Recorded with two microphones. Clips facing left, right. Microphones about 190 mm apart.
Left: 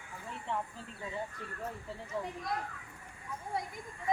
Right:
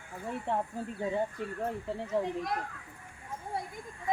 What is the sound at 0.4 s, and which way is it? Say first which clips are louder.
Speech: right 5 dB; 55° right (ahead or behind).